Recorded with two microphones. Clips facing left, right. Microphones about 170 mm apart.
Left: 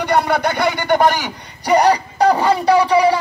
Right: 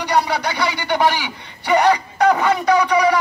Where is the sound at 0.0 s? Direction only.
50° left (ahead or behind).